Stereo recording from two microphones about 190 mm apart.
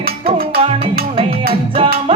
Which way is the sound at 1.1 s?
30° right (ahead or behind).